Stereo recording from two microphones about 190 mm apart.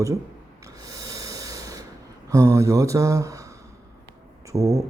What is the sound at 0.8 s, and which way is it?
Snort, 15° right (ahead or behind).